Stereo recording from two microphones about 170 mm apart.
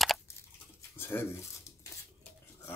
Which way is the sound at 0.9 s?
15° left (ahead or behind).